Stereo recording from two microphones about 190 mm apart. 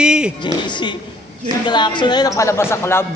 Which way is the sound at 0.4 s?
25° left (ahead or behind).